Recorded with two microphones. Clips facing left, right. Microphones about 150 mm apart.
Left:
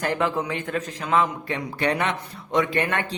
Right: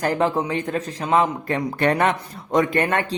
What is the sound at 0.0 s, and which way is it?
A man's voice, 35° right (ahead or behind).